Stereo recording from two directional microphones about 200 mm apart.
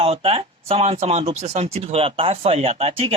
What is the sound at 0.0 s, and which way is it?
Speech, 30° right (ahead or behind).